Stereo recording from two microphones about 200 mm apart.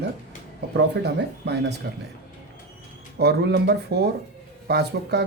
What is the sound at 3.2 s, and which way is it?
Speech, 55° right (ahead or behind).